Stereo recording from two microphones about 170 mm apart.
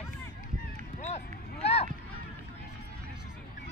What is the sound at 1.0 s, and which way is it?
Run, 40° left (ahead or behind).